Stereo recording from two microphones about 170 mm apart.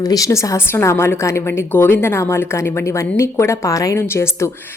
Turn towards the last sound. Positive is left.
turn(degrees=15)  # may be behind; listen again after turning